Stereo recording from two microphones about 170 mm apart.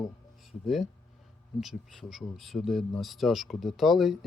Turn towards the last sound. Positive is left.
turn(degrees=0)  # may be behind; listen again after turning